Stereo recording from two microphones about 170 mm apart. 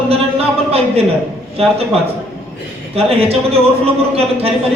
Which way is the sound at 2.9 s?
35° right (ahead or behind).